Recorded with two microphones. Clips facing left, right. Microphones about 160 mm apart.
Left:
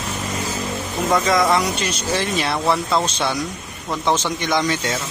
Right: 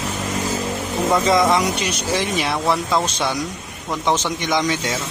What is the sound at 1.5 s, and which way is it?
Speech, 15° right (ahead or behind).